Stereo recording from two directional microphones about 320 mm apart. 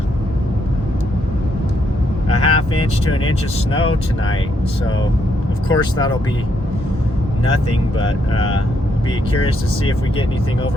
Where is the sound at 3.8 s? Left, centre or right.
Left.